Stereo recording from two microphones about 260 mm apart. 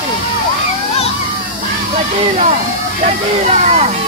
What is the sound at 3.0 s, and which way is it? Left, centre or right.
Speech, right.